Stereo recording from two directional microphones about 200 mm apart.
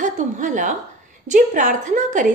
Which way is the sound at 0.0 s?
40° right (ahead or behind).